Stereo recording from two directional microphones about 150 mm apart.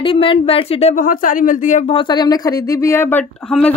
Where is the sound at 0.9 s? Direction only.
60° left (ahead or behind).